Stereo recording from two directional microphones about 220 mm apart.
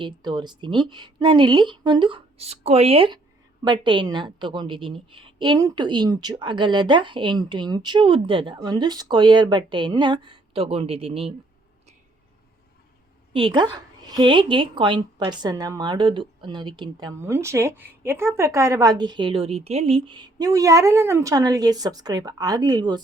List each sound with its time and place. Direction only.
0.0 s a woman's voice: 20° right (ahead or behind)
13.3 s a woman's voice: 20° right (ahead or behind)